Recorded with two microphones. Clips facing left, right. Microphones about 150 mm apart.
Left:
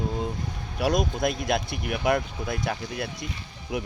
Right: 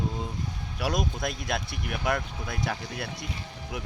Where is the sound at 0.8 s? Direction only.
Centre (ahead or behind).